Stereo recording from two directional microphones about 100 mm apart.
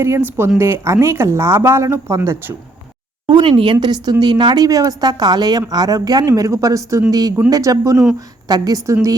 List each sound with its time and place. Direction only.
0.0 s speech: 25° right (ahead or behind)
3.2 s a woman's voice: 60° right (ahead or behind); by 9.1 s 35° right (ahead or behind)